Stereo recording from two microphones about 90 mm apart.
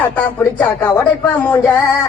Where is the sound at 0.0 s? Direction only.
15° left (ahead or behind).